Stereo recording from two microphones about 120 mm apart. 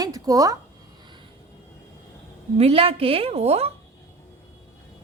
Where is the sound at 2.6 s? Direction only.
55° right (ahead or behind).